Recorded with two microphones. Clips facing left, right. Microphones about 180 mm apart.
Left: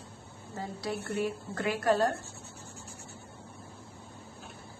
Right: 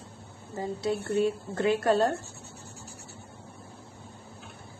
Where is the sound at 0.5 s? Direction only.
20° right (ahead or behind).